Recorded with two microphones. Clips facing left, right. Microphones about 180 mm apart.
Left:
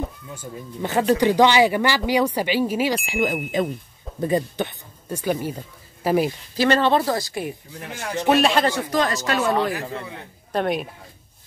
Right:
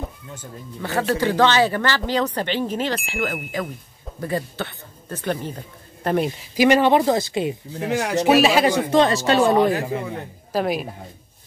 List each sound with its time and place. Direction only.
0.0 s speech: 10° left (ahead or behind)
3.6 s speech: 20° left (ahead or behind); by 6.3 s 5° left (ahead or behind)
6.5 s speech: 15° right (ahead or behind)
7.9 s speech: 80° right
8.3 s speech: 5° right (ahead or behind)
8.6 s speech: 20° right (ahead or behind)
10.5 s speech: centre (ahead or behind)